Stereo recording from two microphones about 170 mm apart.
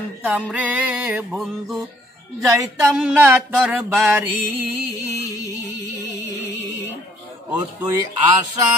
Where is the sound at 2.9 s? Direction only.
5° right (ahead or behind).